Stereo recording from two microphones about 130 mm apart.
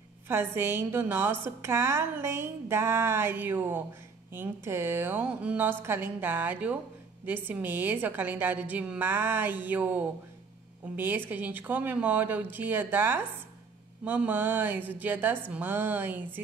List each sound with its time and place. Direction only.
0.3 s a woman's voice: 15° right (ahead or behind)